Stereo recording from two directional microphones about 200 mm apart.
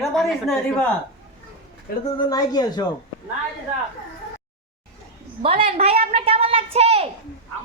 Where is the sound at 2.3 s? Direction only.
20° left (ahead or behind).